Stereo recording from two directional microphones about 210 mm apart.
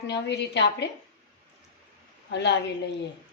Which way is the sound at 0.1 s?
55° left (ahead or behind).